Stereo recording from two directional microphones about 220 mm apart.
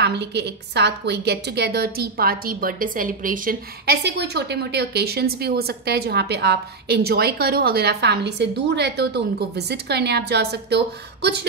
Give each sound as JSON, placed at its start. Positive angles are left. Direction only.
{"t": 0.0, "sound": "a woman's voice", "side_deg": -50}